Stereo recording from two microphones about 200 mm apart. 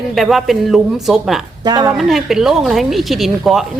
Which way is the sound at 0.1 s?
Centre (ahead or behind).